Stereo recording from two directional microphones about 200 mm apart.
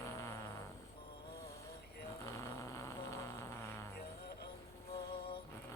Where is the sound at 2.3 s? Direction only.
15° left (ahead or behind).